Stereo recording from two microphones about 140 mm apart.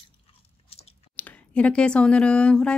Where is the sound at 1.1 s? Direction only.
10° left (ahead or behind).